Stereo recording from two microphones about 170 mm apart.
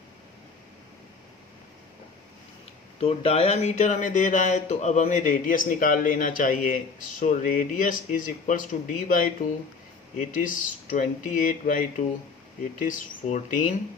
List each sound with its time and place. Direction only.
3.0 s speech: 35° left (ahead or behind)